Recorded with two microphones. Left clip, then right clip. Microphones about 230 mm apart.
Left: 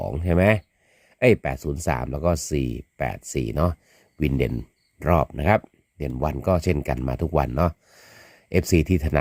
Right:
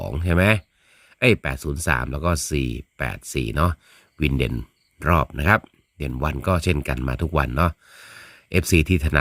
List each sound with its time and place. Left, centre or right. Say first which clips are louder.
0.0 s speech: even; centre